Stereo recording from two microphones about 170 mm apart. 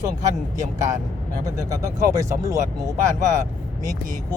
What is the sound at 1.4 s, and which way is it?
Speech, 20° right (ahead or behind).